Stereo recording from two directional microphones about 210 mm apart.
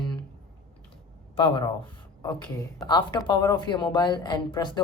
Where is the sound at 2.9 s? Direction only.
20° left (ahead or behind).